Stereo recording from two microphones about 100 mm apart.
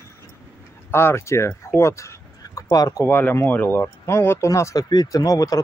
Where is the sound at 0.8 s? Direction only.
25° left (ahead or behind).